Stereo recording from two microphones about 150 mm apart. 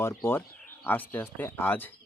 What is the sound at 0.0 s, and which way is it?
Speech, 15° left (ahead or behind).